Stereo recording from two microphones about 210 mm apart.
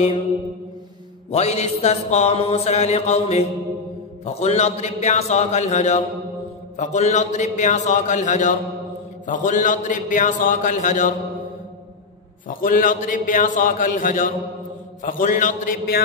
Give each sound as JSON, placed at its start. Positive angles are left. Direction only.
{"t": 1.3, "sound": "music", "side_deg": 30}
{"t": 12.4, "sound": "music", "side_deg": 40}